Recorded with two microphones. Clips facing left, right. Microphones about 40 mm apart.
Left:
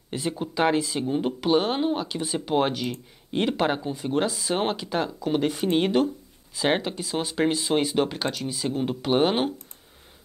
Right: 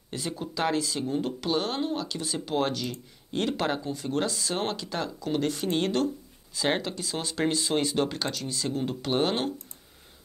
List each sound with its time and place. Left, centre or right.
0.1 s speech: left